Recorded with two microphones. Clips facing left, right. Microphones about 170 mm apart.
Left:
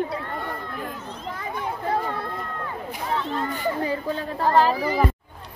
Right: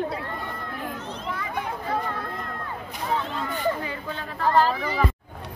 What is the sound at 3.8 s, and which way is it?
Speech, 35° left (ahead or behind).